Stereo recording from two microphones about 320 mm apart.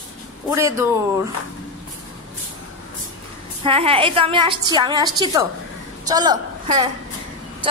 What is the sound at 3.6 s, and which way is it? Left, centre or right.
A woman's voice, centre.